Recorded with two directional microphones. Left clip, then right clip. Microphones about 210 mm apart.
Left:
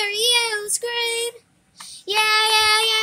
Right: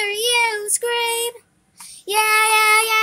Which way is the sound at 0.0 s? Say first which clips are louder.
Right 1 dB; 5° right (ahead or behind).